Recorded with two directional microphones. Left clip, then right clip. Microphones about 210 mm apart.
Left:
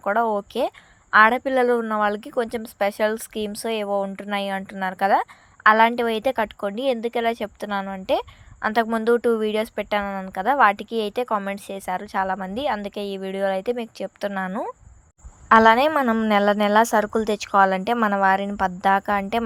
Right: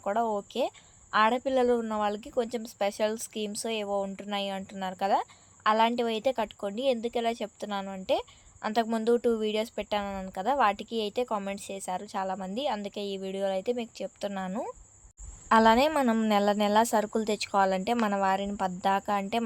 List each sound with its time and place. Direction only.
0.0 s a woman's voice: 15° left (ahead or behind)